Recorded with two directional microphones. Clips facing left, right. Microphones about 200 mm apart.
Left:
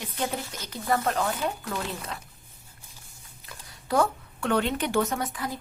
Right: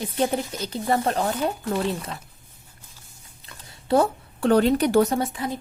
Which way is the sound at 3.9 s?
30° right (ahead or behind).